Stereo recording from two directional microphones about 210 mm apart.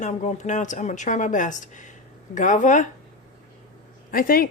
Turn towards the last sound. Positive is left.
turn(degrees=45)  # may be behind; listen again after turning